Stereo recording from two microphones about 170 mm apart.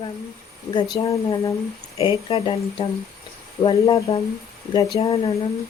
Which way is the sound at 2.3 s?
35° left (ahead or behind).